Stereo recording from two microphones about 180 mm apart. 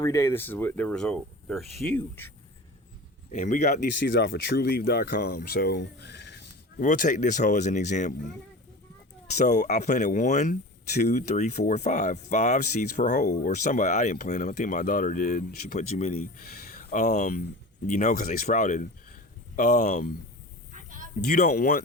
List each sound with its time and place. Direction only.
0.0 s speech: 15° left (ahead or behind)
3.3 s speech: 40° left (ahead or behind)
4.1 s speech: 75° left (ahead or behind)
6.8 s speech: 45° left (ahead or behind)
9.5 s speech: 40° left (ahead or behind)
21.2 s speech: 45° left (ahead or behind)